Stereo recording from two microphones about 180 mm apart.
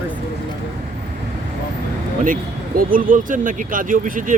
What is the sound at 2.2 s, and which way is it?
Speech, 50° right (ahead or behind).